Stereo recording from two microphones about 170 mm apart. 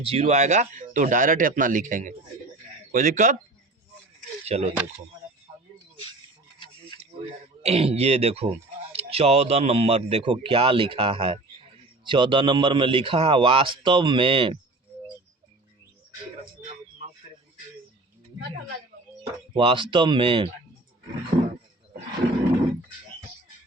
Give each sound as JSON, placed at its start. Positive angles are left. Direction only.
{"t": 0.0, "sound": "speech", "side_deg": -40}
{"t": 4.4, "sound": "speech", "side_deg": -35}
{"t": 7.6, "sound": "a man's voice", "side_deg": -40}
{"t": 19.5, "sound": "speech", "side_deg": -30}
{"t": 21.3, "sound": "a sound", "side_deg": -30}